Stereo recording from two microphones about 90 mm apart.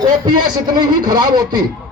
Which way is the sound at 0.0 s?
55° right (ahead or behind).